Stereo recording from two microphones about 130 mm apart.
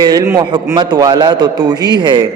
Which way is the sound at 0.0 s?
30° right (ahead or behind).